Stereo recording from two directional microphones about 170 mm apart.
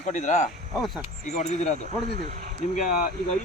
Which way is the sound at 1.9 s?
50° right (ahead or behind).